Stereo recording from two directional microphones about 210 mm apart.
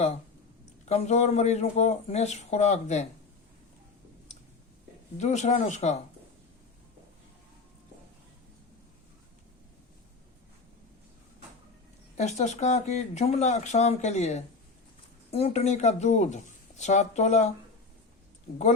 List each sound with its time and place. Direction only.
0.9 s speech: 30° left (ahead or behind)
5.1 s speech: 35° left (ahead or behind)
12.1 s speech: 35° left (ahead or behind)